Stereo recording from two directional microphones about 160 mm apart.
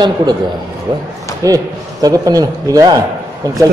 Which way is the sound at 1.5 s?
20° right (ahead or behind).